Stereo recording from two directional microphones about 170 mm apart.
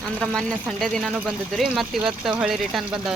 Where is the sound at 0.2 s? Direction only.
5° left (ahead or behind).